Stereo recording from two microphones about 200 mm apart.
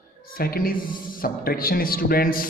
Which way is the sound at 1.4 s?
50° left (ahead or behind).